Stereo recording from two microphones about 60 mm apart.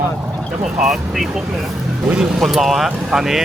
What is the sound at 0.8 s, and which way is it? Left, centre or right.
Speech, centre.